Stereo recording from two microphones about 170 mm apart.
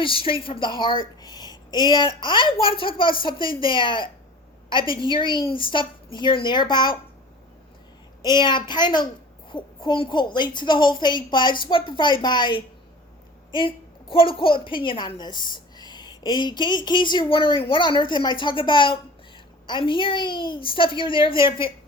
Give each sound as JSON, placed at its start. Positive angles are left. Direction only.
{"t": 0.0, "sound": "a woman's voice", "side_deg": 30}
{"t": 8.2, "sound": "a woman's voice", "side_deg": 25}